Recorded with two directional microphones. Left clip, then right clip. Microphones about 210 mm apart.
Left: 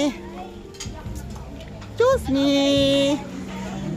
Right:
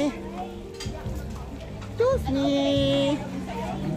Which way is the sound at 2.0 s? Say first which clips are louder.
Left 5 dB; 30° left (ahead or behind).